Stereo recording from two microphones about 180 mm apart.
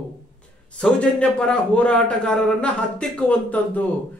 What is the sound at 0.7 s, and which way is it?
A man's voice, 5° left (ahead or behind).